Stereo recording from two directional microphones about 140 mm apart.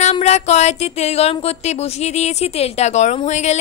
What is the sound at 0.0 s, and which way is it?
A woman's voice, 50° left (ahead or behind).